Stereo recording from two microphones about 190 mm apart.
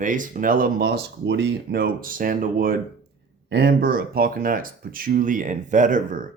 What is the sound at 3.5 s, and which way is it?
Speech, 60° right (ahead or behind).